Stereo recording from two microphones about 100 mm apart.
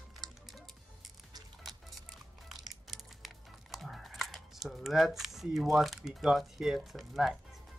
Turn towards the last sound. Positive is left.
turn(degrees=0)  # may be behind; listen again after turning